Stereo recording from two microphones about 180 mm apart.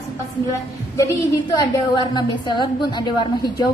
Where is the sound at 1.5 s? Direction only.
25° left (ahead or behind).